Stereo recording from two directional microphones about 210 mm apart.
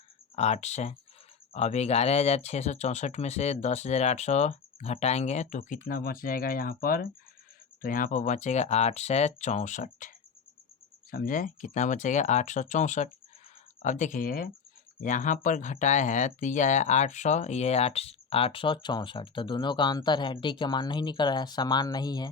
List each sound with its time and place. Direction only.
0.3 s speech: 30° left (ahead or behind)
11.1 s speech: 40° left (ahead or behind); by 22.3 s 20° left (ahead or behind)